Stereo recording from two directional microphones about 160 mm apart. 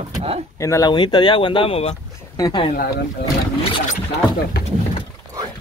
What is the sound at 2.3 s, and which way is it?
Speech, 25° left (ahead or behind).